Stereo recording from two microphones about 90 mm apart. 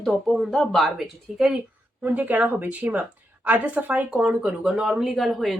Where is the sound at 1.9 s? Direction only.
15° right (ahead or behind).